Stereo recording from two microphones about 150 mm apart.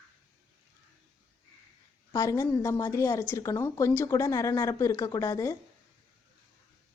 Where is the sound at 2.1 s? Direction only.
20° left (ahead or behind).